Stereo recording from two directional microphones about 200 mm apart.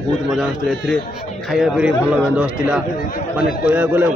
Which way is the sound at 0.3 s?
Centre (ahead or behind).